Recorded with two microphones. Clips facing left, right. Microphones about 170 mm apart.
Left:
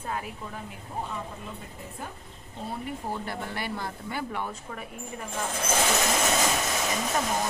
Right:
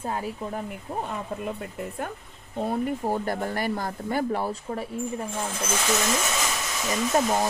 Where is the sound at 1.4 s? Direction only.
65° right (ahead or behind).